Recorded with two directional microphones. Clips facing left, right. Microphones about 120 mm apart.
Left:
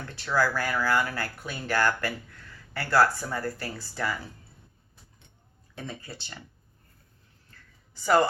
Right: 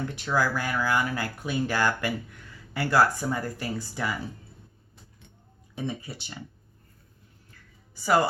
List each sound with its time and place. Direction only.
0.1 s speech: 15° right (ahead or behind)
5.7 s speech: 15° right (ahead or behind)
7.9 s speech: 10° right (ahead or behind)